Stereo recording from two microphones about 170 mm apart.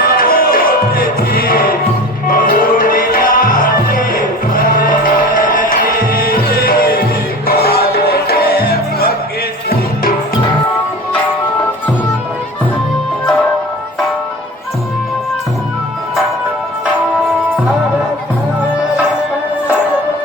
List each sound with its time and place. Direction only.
0.0 s music: 60° left (ahead or behind)